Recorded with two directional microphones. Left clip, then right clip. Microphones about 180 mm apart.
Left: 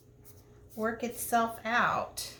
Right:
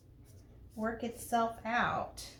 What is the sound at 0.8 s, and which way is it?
Speech, 30° left (ahead or behind).